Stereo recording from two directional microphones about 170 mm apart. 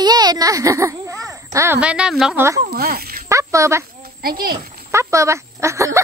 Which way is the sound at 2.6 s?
65° right (ahead or behind).